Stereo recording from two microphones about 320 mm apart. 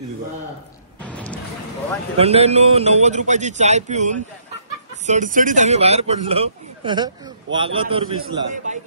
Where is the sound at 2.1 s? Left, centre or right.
Centre.